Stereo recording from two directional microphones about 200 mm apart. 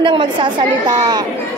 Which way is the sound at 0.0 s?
25° right (ahead or behind).